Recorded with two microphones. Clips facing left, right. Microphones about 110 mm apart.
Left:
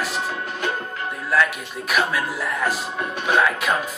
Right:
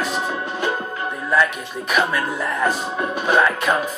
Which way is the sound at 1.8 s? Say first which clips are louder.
Right 2 dB; 5° left (ahead or behind).